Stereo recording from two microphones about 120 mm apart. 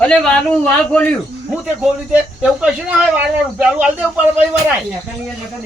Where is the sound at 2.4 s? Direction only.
10° right (ahead or behind).